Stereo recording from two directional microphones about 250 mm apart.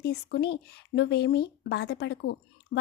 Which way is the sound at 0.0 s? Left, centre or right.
Left.